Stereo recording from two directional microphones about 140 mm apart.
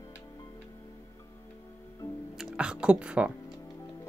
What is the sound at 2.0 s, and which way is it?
Music, 15° left (ahead or behind).